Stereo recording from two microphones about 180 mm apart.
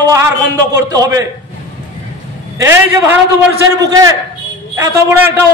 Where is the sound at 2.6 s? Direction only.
15° right (ahead or behind).